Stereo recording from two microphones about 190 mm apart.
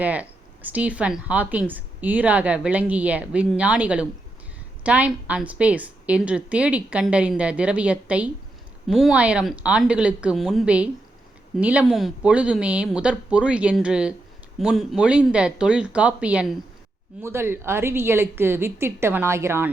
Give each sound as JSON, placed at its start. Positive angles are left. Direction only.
{"t": 0.0, "sound": "a woman's voice", "side_deg": -10}